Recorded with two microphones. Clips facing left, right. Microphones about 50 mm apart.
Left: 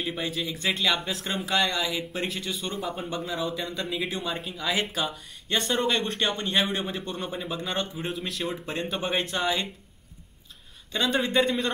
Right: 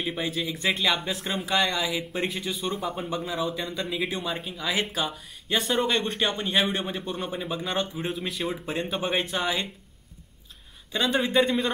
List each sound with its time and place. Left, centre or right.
0.0 s speech: centre
10.9 s speech: centre